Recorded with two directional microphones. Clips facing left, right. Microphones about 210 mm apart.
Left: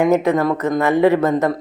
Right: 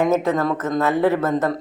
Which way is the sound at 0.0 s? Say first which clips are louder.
Left 3 dB; 15° left (ahead or behind).